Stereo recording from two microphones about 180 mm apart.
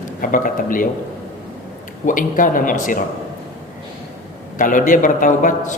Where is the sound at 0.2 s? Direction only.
50° left (ahead or behind).